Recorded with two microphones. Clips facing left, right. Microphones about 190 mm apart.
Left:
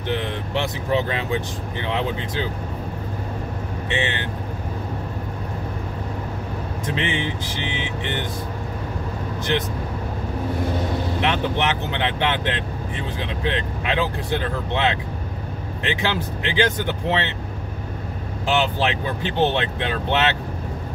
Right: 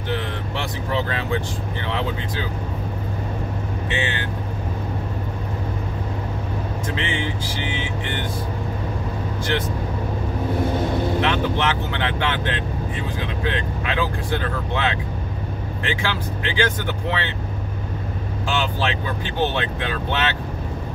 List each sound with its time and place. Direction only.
0.1 s speech: 20° left (ahead or behind)
3.9 s speech: 25° left (ahead or behind)
7.0 s speech: 20° left (ahead or behind)
11.1 s speech: 20° left (ahead or behind)
18.5 s speech: 20° left (ahead or behind)